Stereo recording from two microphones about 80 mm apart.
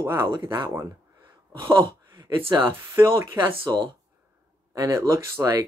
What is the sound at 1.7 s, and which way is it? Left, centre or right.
Speech, right.